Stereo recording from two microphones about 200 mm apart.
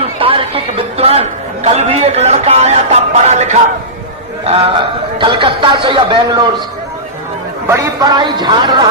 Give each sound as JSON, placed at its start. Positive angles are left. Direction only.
{"t": 0.2, "sound": "music", "side_deg": -25}
{"t": 4.4, "sound": "speech", "side_deg": -25}
{"t": 7.7, "sound": "speech", "side_deg": -15}